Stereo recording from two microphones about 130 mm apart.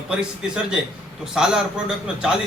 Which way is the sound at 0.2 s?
5° right (ahead or behind).